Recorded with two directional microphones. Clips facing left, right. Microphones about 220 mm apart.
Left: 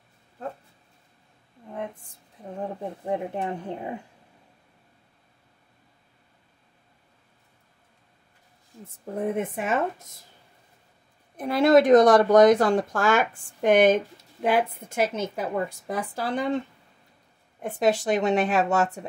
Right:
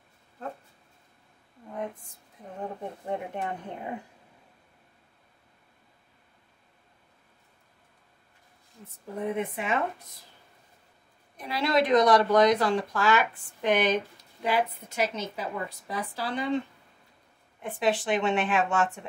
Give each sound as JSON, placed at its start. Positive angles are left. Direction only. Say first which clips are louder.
{"t": 8.8, "sound": "speech", "louder": "left 4 dB", "side_deg": 45}
{"t": 11.3, "sound": "speech", "louder": "left 8 dB", "side_deg": 50}
{"t": 17.6, "sound": "speech", "louder": "left 4 dB", "side_deg": 45}